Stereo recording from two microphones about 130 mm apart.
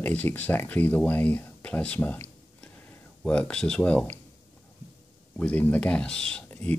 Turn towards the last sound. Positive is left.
turn(degrees=5)  # may be behind; listen again after turning